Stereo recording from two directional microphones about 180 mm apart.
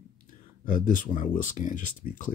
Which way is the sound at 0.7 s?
50° left (ahead or behind).